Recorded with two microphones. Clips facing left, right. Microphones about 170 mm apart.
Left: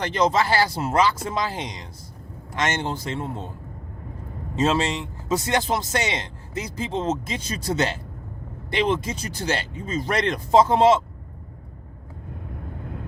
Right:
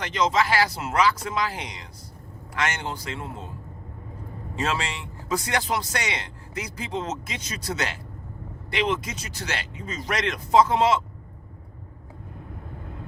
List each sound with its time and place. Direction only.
0.0 s a man's voice: 35° left (ahead or behind)
4.5 s a man's voice: 25° left (ahead or behind)